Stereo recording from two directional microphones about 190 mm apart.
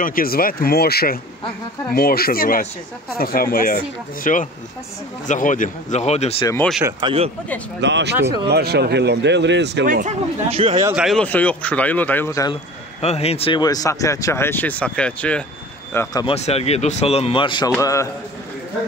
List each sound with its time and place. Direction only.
0.0 s speech: 50° left (ahead or behind)
6.4 s speech: 15° left (ahead or behind)
7.0 s speech: 25° right (ahead or behind)
7.8 s speech: 65° right (ahead or behind)
9.8 s speech: 45° right (ahead or behind)
10.5 s speech: 30° right (ahead or behind)
11.0 s speech: centre (ahead or behind); by 12.5 s 15° left (ahead or behind)
13.0 s speech: 35° left (ahead or behind); by 15.4 s 5° left (ahead or behind)
15.9 s speech: 15° left (ahead or behind)
16.3 s speech: 35° left (ahead or behind)
17.7 s speech: 15° left (ahead or behind)